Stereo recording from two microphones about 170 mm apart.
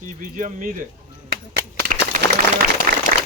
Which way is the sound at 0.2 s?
50° right (ahead or behind).